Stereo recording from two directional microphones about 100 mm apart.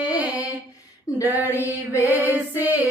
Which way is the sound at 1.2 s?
20° right (ahead or behind).